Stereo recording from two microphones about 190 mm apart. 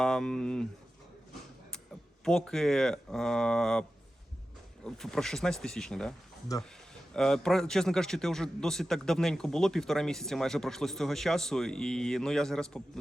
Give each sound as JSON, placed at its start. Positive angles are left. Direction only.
{"t": 0.0, "sound": "a man's voice", "side_deg": 5}
{"t": 2.2, "sound": "a man's voice", "side_deg": 5}
{"t": 6.5, "sound": "speech", "side_deg": 20}
{"t": 7.1, "sound": "a man's voice", "side_deg": 5}